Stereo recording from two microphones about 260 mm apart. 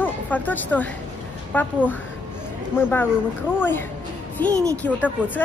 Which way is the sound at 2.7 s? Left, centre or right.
Centre.